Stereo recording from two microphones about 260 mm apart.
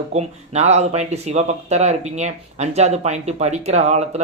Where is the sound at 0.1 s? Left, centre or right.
Right.